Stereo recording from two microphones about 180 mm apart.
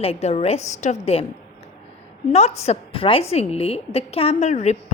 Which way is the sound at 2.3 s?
35° left (ahead or behind).